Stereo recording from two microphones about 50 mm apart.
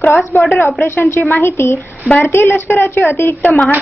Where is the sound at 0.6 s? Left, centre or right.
Left.